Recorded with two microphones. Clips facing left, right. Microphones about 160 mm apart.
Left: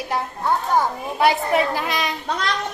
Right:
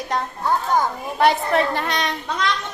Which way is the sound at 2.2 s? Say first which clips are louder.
Right 2 dB; 40° left (ahead or behind).